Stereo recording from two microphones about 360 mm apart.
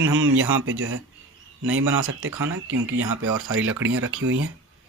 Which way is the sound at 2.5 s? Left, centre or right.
Right.